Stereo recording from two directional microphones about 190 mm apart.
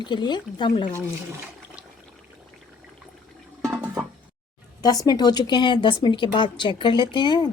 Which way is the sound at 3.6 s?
5° right (ahead or behind).